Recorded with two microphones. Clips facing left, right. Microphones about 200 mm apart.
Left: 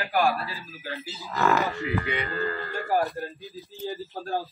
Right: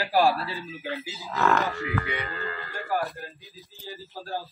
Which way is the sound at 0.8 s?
15° right (ahead or behind).